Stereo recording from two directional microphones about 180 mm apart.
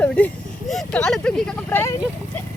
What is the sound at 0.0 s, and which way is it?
Vehicle, 10° left (ahead or behind).